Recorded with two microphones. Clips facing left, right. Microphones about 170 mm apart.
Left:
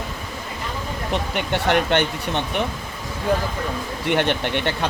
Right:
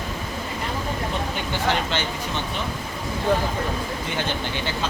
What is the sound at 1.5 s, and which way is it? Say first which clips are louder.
Speech: left 6 dB; 65° left (ahead or behind).